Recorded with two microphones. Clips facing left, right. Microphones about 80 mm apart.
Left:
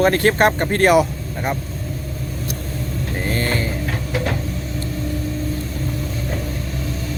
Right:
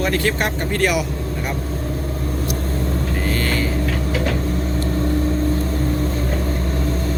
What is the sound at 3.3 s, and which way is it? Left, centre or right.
Vehicle, left.